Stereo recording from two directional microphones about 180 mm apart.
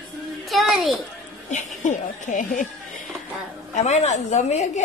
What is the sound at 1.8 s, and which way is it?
Speech, 40° left (ahead or behind).